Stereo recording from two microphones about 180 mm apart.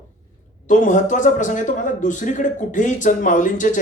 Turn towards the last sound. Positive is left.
turn(degrees=45)  # may be behind; listen again after turning